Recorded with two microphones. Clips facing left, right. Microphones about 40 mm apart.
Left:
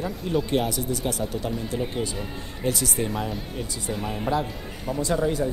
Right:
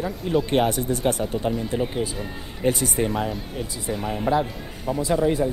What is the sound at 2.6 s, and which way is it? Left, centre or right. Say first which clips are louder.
Speech: right 4 dB; right.